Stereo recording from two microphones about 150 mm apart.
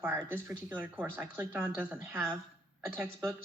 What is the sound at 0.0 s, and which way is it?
Speech, 15° right (ahead or behind).